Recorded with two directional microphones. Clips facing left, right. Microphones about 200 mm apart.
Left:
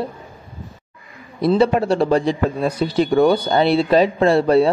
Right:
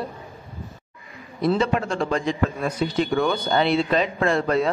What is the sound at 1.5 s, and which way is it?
A man's voice, 35° left (ahead or behind).